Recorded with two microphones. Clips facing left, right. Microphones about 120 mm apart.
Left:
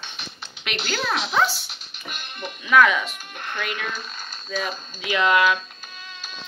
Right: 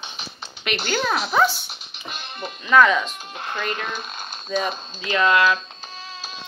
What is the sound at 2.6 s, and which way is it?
Speech, 5° left (ahead or behind).